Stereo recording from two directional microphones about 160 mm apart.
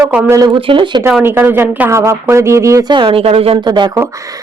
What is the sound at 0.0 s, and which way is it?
Speech, 10° right (ahead or behind).